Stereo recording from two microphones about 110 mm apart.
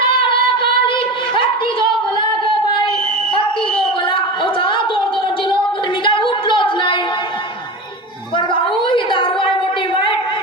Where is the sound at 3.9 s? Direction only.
50° left (ahead or behind).